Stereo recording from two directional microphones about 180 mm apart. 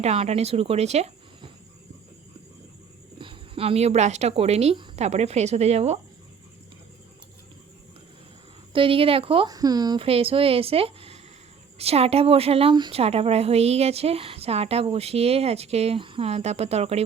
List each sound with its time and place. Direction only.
0.0 s a woman's voice: 35° right (ahead or behind)
3.2 s a woman's voice: 30° right (ahead or behind)
8.7 s a woman's voice: 30° right (ahead or behind)